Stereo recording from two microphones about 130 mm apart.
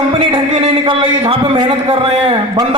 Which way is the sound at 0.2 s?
50° right (ahead or behind).